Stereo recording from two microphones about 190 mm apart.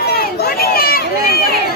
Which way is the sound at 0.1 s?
55° left (ahead or behind).